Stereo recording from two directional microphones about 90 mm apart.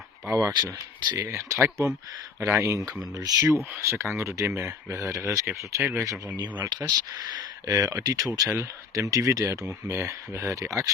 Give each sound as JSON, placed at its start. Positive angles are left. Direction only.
{"t": 0.3, "sound": "speech", "side_deg": -35}
{"t": 6.7, "sound": "speech", "side_deg": -50}
{"t": 7.7, "sound": "speech", "side_deg": -35}